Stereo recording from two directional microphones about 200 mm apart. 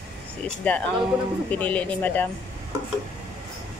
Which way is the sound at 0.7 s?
5° left (ahead or behind).